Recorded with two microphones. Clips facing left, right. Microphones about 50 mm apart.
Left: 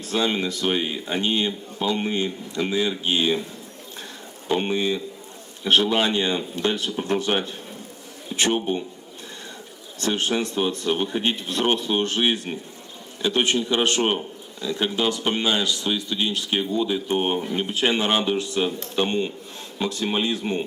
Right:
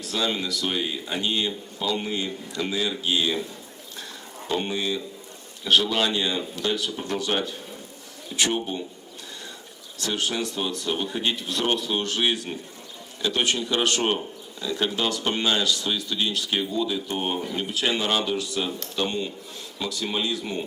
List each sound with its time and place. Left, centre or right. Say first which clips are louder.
0.0 s speech: left 3 dB; left
4.4 s speech: left 4 dB; left
8.5 s speech: left 4 dB; left
10.0 s speech: left 4 dB; left